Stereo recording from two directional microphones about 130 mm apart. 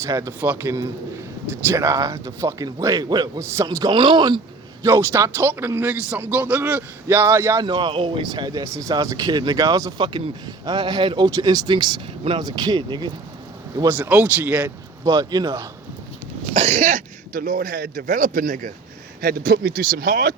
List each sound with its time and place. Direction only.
0.0 s speech: 25° right (ahead or behind)
0.3 s a man's voice: 15° right (ahead or behind)
1.7 s speech: 25° right (ahead or behind)
3.9 s speech: 35° right (ahead or behind)
4.8 s a man's voice: 20° right (ahead or behind)
7.6 s speech: 35° right (ahead or behind)
13.8 s a man's voice: 15° right (ahead or behind)
15.0 s speech: 30° right (ahead or behind)
16.6 s speech: 70° right (ahead or behind); by 20.3 s 90° right